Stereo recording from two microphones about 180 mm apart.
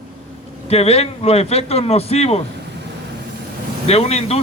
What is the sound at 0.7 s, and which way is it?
Speech, 35° left (ahead or behind).